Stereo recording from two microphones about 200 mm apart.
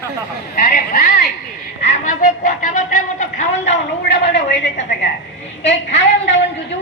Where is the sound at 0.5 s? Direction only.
45° left (ahead or behind).